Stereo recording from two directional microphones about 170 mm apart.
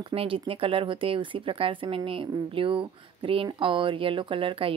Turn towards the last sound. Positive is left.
turn(degrees=-30)  # may be behind; listen again after turning